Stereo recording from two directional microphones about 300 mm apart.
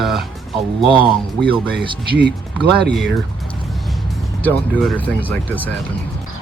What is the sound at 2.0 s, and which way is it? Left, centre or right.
Speech, right.